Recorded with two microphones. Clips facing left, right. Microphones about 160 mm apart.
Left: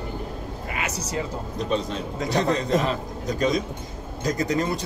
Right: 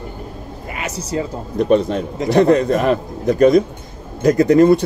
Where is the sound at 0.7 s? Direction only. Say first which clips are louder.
Right 6 dB; 30° right (ahead or behind).